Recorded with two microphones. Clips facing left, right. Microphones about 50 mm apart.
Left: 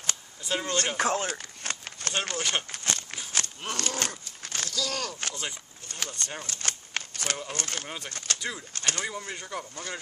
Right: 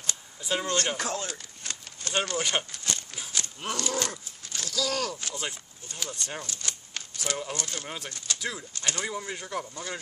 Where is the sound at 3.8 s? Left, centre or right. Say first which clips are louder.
Right 1 dB; left.